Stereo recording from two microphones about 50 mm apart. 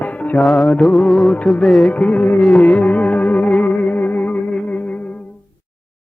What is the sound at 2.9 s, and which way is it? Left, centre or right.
Music, left.